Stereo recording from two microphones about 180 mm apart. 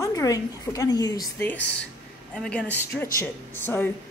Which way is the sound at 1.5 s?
75° left (ahead or behind).